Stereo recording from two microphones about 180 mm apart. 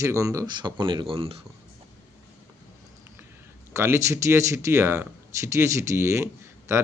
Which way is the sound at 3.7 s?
15° right (ahead or behind).